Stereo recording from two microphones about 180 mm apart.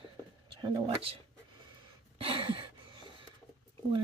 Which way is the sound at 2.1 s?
30° right (ahead or behind).